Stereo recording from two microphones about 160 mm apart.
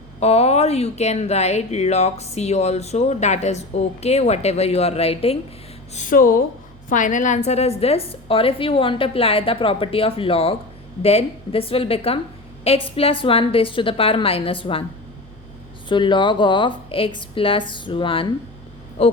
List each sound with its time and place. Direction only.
0.2 s speech: 40° left (ahead or behind)
5.9 s a woman's voice: 55° left (ahead or behind); by 14.8 s 35° left (ahead or behind)
15.9 s a woman's voice: 30° left (ahead or behind)